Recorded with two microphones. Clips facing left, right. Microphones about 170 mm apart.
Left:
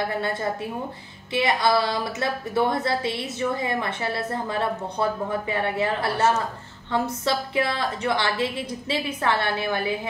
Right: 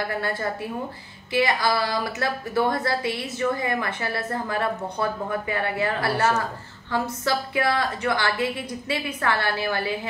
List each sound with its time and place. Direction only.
0.2 s a woman's voice: 20° left (ahead or behind)